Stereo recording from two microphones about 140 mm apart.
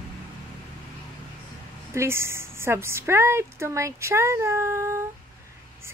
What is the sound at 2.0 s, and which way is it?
A woman's voice, 20° right (ahead or behind).